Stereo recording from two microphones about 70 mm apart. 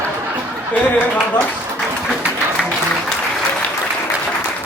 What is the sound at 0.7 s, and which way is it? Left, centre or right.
Speech, left.